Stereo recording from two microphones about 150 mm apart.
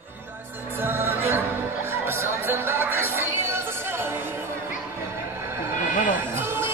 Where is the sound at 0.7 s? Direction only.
15° right (ahead or behind).